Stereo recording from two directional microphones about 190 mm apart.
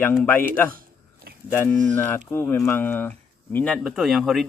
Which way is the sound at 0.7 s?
50° right (ahead or behind).